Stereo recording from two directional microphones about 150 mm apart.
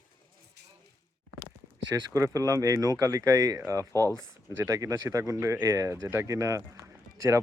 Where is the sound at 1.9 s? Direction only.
20° right (ahead or behind).